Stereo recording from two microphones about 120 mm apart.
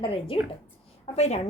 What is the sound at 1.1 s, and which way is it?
Speech, 65° left (ahead or behind).